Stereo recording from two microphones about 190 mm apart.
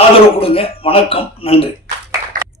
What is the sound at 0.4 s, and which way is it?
A man's voice, 30° left (ahead or behind).